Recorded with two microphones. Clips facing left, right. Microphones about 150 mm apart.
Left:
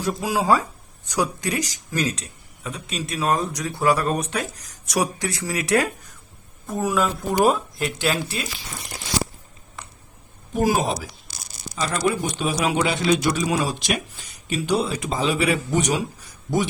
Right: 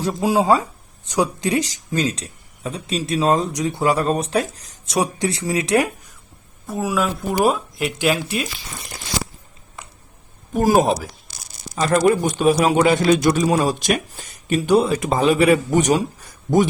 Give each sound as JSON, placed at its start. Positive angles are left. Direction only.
{"t": 0.0, "sound": "speech", "side_deg": -25}
{"t": 6.7, "sound": "speech", "side_deg": -5}
{"t": 10.5, "sound": "speech", "side_deg": -45}